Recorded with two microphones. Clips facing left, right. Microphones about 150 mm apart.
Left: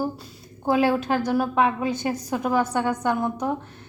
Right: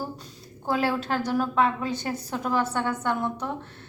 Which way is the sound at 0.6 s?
15° left (ahead or behind).